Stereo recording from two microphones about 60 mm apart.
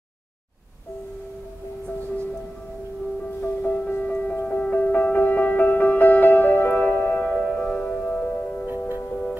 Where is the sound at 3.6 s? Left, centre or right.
Left.